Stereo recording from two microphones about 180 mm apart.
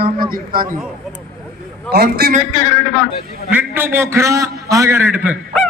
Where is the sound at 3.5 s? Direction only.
10° right (ahead or behind).